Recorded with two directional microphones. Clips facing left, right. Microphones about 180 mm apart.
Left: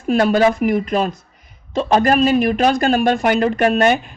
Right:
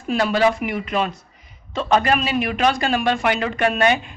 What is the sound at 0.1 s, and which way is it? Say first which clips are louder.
A man's voice: left 4 dB; 45° left (ahead or behind).